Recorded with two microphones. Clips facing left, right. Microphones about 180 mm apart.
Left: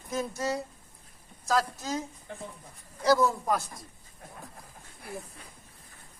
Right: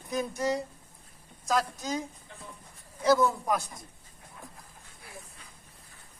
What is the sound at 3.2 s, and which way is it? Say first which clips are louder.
Speech: even; centre (ahead or behind).